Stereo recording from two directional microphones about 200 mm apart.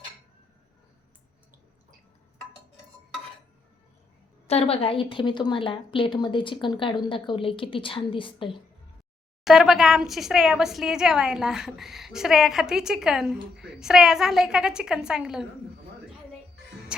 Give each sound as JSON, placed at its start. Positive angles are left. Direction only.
{"t": 4.4, "sound": "a woman's voice", "side_deg": 30}
{"t": 9.4, "sound": "speech", "side_deg": 0}